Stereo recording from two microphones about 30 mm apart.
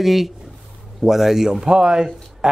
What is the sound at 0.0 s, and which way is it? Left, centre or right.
Speech, centre.